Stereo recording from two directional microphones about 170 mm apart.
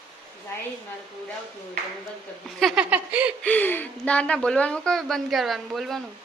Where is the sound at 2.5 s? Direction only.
Centre (ahead or behind).